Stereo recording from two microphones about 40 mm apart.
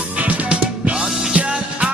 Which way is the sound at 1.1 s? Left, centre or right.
Centre.